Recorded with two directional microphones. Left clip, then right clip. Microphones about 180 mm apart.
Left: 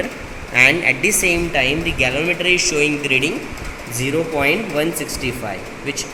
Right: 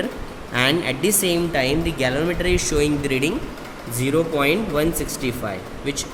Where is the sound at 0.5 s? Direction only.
70° right (ahead or behind).